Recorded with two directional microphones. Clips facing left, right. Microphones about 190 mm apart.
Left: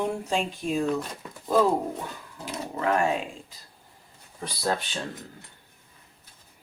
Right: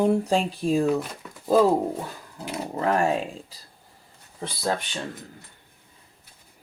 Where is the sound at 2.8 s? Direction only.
35° right (ahead or behind).